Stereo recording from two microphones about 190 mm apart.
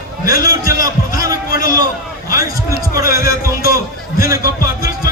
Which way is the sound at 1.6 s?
20° right (ahead or behind).